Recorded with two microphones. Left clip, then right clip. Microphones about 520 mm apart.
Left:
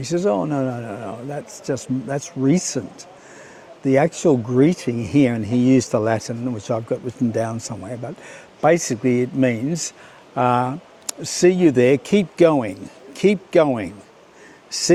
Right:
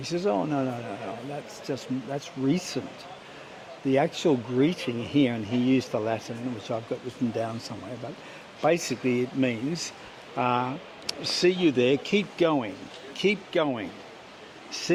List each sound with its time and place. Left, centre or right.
0.0 s speech: left
3.8 s speech: left